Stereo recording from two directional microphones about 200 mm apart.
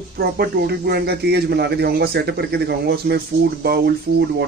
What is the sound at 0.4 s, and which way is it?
Speech, 50° right (ahead or behind).